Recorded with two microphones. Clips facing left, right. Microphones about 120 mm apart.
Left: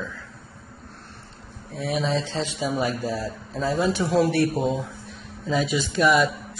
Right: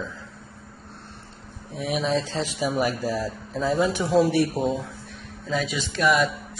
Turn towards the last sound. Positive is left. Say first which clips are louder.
# left 3 dB
turn(degrees=5)  # may be behind; listen again after turning